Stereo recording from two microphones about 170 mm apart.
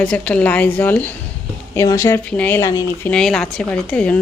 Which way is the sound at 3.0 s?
5° left (ahead or behind).